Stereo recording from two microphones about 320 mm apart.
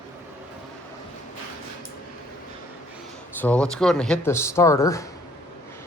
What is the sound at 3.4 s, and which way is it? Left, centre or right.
Speech, centre.